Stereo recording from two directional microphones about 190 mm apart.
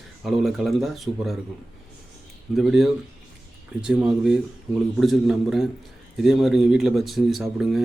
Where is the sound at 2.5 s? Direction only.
Centre (ahead or behind).